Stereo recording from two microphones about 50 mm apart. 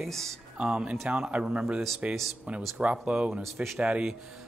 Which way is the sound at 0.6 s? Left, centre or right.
Centre.